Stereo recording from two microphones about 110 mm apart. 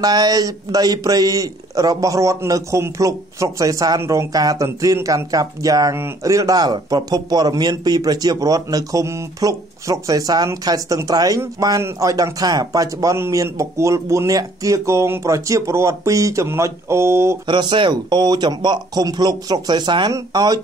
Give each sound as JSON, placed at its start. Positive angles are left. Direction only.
{"t": 0.0, "sound": "a man's voice", "side_deg": -35}
{"t": 17.5, "sound": "a man's voice", "side_deg": -45}